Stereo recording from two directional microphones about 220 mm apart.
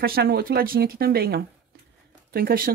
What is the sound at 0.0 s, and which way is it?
Speech, 45° right (ahead or behind).